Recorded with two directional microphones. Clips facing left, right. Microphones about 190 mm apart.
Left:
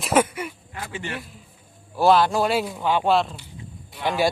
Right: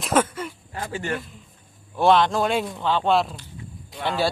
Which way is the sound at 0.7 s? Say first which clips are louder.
Right 4 dB; 40° right (ahead or behind).